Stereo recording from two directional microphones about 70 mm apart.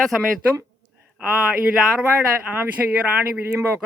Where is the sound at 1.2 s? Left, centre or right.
Centre.